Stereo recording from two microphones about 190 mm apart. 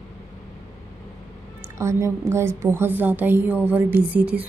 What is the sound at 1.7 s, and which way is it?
A woman's voice, 15° right (ahead or behind).